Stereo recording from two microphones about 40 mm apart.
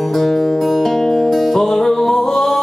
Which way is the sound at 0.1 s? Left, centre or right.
Centre.